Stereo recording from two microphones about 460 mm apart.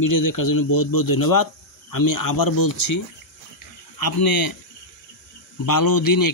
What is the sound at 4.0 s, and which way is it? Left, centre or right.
Speech, left.